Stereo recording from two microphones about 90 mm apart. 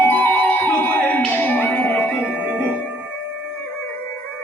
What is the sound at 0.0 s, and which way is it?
Music, 20° left (ahead or behind).